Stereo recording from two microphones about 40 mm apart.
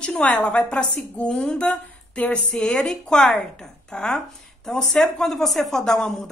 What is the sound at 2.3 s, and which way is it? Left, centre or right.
A woman's voice, left.